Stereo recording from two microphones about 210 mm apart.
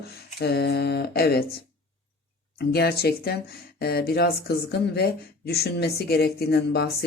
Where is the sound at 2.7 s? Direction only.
50° left (ahead or behind).